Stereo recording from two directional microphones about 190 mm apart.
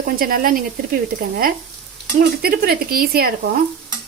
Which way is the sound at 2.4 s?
50° right (ahead or behind).